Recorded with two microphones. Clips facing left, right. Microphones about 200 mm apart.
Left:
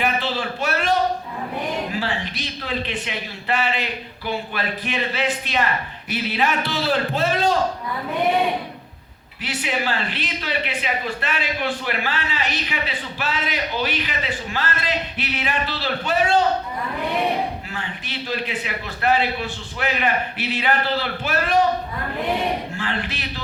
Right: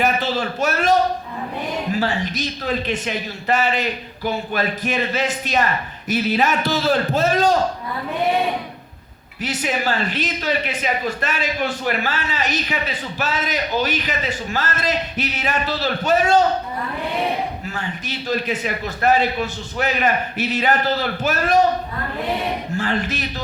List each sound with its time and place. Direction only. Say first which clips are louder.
0.0 s a sound: right 3 dB; 45° right (ahead or behind)
1.9 s speech: right 5 dB; 45° right (ahead or behind)
9.4 s speech: right 3 dB; 45° right (ahead or behind)
17.7 s speech: right 3 dB; 45° right (ahead or behind)
22.8 s speech: right 5 dB; 45° right (ahead or behind)